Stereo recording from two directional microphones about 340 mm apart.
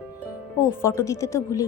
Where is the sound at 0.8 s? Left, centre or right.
Centre.